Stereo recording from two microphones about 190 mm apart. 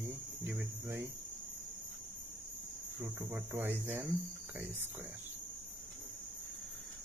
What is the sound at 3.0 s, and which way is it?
Cricket, 10° right (ahead or behind).